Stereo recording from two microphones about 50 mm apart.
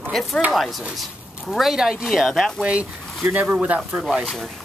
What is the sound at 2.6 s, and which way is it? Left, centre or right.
Speech, right.